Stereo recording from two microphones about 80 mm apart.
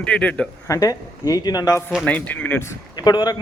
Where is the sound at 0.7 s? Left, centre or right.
Left.